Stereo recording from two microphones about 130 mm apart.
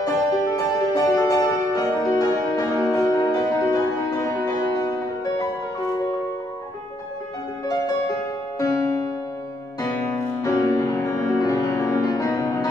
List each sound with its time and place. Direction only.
0.0 s music: 25° left (ahead or behind)
7.6 s music: 25° left (ahead or behind)
10.4 s music: 25° left (ahead or behind)